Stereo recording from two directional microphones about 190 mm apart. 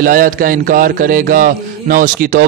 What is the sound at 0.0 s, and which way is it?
Speech, 45° right (ahead or behind).